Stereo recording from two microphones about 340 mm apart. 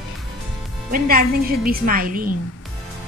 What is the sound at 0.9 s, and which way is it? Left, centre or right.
A woman's voice, right.